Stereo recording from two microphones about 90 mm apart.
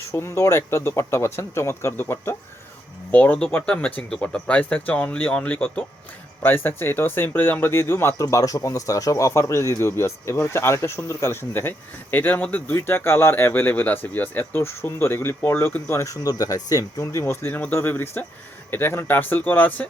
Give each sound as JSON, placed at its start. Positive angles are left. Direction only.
{"t": 0.1, "sound": "speech", "side_deg": 30}
{"t": 8.2, "sound": "speech", "side_deg": 40}